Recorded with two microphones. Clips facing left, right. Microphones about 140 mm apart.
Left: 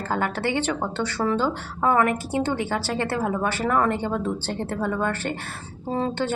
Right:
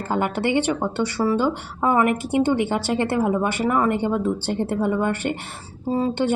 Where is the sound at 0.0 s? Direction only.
15° right (ahead or behind).